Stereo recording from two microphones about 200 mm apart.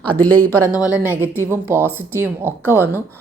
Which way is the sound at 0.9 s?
5° right (ahead or behind).